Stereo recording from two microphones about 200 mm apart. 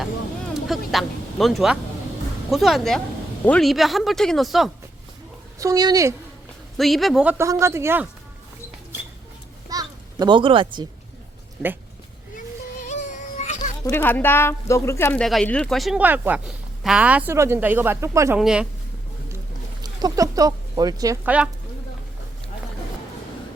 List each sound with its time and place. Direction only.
0.5 s speech: centre (ahead or behind)
5.5 s speech: 15° right (ahead or behind)
6.7 s speech: centre (ahead or behind)
9.6 s a sound: 20° right (ahead or behind)
12.8 s music: 35° left (ahead or behind)
13.6 s speech: 15° left (ahead or behind); by 18.3 s 15° right (ahead or behind)
18.3 s speech: 5° right (ahead or behind)
19.8 s speech: 20° right (ahead or behind)
21.2 s speech: 5° right (ahead or behind)